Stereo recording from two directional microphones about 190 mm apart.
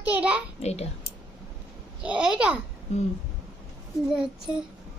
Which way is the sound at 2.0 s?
5° right (ahead or behind).